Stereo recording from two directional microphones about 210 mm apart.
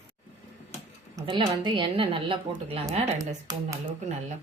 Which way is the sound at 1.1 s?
20° right (ahead or behind).